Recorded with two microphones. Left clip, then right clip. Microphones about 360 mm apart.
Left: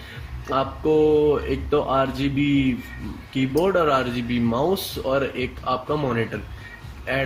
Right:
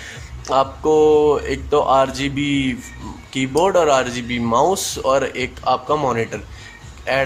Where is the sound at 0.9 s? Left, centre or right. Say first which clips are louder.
Right 4 dB; right.